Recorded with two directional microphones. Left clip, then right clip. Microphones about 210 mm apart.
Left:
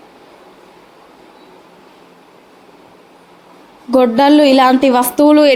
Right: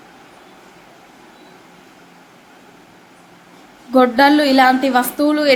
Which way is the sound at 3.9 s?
30° left (ahead or behind).